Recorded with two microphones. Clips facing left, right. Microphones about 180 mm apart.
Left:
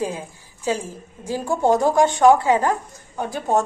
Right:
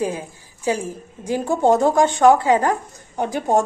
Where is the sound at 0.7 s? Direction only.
15° right (ahead or behind).